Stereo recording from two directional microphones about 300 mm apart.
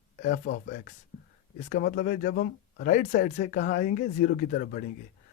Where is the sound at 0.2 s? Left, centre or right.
Left.